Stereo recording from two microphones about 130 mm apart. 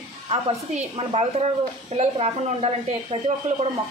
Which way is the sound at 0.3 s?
55° right (ahead or behind).